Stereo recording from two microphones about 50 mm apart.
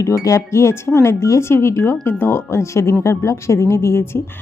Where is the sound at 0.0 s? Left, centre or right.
Left.